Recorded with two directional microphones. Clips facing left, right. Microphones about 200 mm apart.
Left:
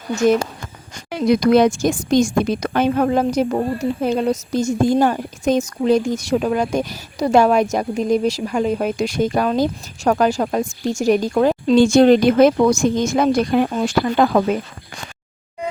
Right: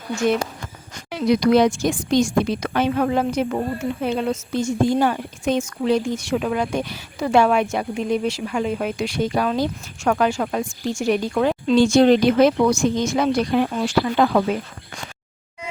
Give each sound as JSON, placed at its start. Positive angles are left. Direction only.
{"t": 0.2, "sound": "speech", "side_deg": 40}